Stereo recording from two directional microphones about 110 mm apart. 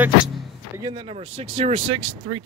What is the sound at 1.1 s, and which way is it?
Speech, 90° right.